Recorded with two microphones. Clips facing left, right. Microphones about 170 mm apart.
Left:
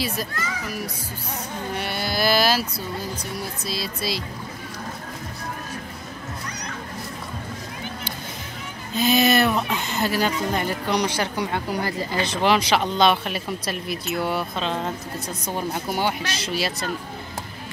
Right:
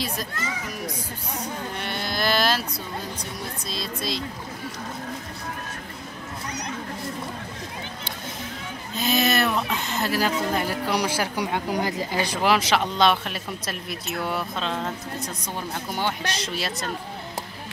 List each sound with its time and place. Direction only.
1.8 s a sound: 5° left (ahead or behind)
3.6 s speech: 5° left (ahead or behind)
8.9 s speech: centre (ahead or behind)